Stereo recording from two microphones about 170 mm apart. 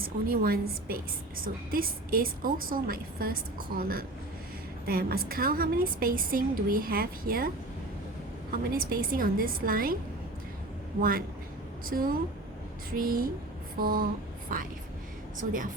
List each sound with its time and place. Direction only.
0.0 s a woman's voice: 60° right (ahead or behind)
8.5 s a woman's voice: 60° right (ahead or behind)
11.9 s a woman's voice: 60° right (ahead or behind)